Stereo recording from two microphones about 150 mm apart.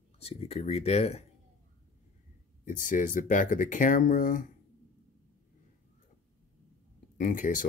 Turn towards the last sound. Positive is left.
turn(degrees=60)  # may be behind; listen again after turning